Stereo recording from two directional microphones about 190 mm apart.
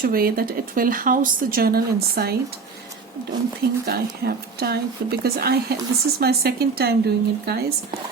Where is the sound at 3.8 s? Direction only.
55° right (ahead or behind).